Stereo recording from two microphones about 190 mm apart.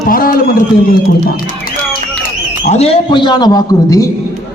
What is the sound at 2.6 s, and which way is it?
A man's voice, 35° left (ahead or behind).